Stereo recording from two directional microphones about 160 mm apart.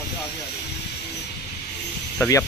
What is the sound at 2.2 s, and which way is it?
Speech, 20° left (ahead or behind).